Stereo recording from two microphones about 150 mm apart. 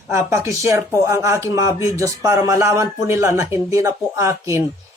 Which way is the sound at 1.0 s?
20° right (ahead or behind).